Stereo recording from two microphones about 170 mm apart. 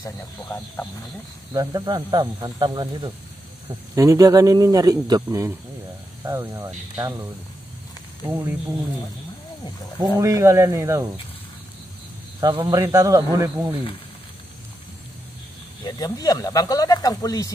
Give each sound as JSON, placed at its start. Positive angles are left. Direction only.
{"t": 0.0, "sound": "speech", "side_deg": 15}
{"t": 1.5, "sound": "speech", "side_deg": -20}
{"t": 8.3, "sound": "speech", "side_deg": -10}
{"t": 9.9, "sound": "speech", "side_deg": -20}
{"t": 12.5, "sound": "speech", "side_deg": -15}
{"t": 15.8, "sound": "speech", "side_deg": 25}